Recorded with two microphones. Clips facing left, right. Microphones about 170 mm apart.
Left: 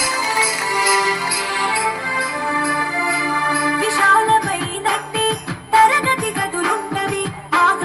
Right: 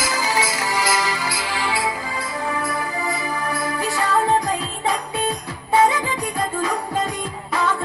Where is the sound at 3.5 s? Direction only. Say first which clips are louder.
Left 5 dB; 70° left (ahead or behind).